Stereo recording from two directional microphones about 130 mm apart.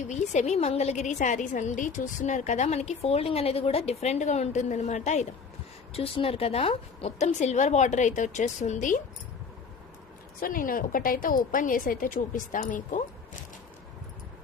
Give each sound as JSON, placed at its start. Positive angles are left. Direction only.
{"t": 0.1, "sound": "a woman's voice", "side_deg": 65}
{"t": 5.9, "sound": "a woman's voice", "side_deg": 45}
{"t": 10.4, "sound": "a woman's voice", "side_deg": 90}